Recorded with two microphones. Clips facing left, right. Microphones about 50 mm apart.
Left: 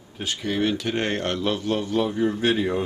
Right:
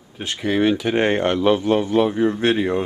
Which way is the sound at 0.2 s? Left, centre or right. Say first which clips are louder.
Right 5 dB; right.